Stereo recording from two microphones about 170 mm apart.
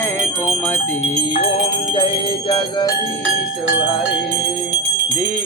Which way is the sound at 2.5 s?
30° left (ahead or behind).